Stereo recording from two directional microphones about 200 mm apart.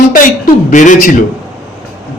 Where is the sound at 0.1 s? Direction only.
40° left (ahead or behind).